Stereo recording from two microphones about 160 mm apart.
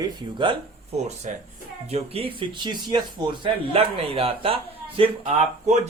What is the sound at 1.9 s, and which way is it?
Speech, 35° right (ahead or behind).